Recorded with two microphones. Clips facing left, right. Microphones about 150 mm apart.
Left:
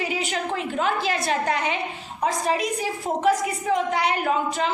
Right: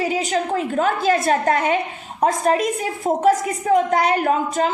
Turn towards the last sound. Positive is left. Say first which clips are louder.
# right 4 dB
turn(degrees=-45)  # may be behind; listen again after turning